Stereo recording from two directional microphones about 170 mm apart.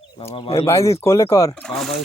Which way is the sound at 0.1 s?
35° left (ahead or behind).